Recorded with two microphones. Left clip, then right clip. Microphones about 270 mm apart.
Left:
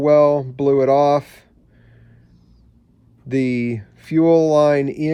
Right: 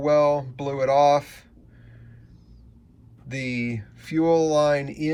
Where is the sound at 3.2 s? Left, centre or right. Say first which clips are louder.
Left 8 dB; left.